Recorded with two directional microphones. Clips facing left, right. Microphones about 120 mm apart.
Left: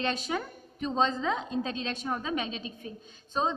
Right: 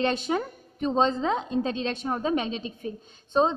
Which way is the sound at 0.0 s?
35° right (ahead or behind).